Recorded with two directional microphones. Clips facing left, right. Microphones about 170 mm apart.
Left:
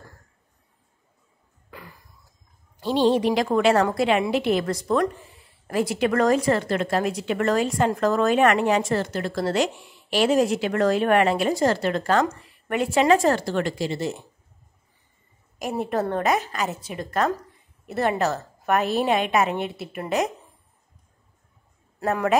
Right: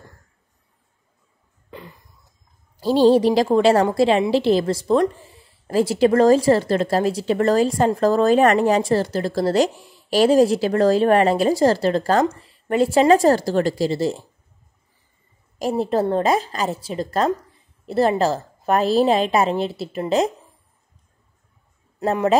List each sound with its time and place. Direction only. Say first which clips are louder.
1.7 s cough: right 5 dB; 20° right (ahead or behind)
2.8 s a woman's voice: right 5 dB; 35° right (ahead or behind)
15.6 s a woman's voice: right 5 dB; 30° right (ahead or behind)
22.0 s a man's voice: right 4 dB; 25° right (ahead or behind)